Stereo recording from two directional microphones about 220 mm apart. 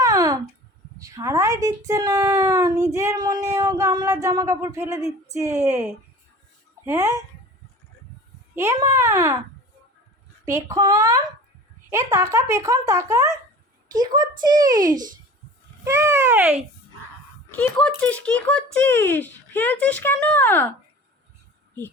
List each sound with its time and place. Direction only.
0.0 s a sound: 15° right (ahead or behind)
0.9 s speech: 15° right (ahead or behind)
8.5 s speech: 10° right (ahead or behind)
10.4 s a child's voice: 15° right (ahead or behind)
17.5 s a child's voice: 5° left (ahead or behind)